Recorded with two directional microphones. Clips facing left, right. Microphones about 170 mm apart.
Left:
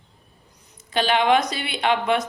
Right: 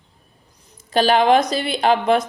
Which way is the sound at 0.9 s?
40° right (ahead or behind).